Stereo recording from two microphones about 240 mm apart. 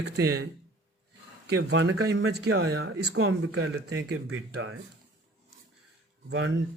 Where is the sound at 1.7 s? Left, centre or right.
Right.